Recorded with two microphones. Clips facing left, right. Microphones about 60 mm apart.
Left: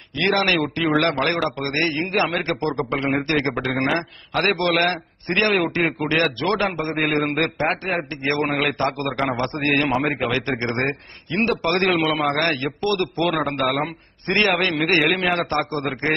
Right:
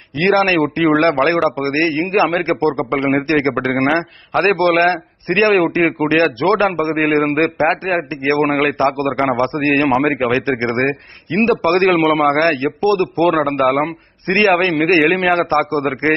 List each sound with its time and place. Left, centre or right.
0.2 s a man's voice: right
4.5 s a man's voice: right